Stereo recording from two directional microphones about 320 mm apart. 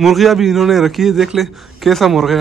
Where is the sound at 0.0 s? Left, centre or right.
Centre.